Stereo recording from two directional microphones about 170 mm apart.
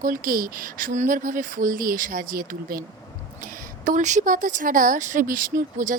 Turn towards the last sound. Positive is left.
turn(degrees=-55)  # may be behind; listen again after turning